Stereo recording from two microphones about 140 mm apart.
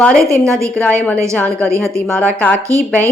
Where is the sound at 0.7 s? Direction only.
10° left (ahead or behind).